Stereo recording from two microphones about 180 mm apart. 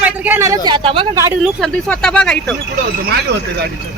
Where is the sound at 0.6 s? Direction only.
30° right (ahead or behind).